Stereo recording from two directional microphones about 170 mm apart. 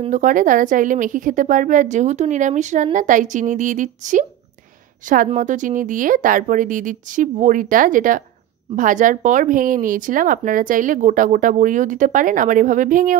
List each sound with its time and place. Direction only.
0.1 s speech: 50° right (ahead or behind)